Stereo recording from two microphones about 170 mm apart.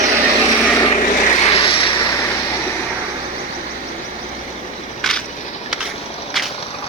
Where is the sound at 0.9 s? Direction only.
45° left (ahead or behind).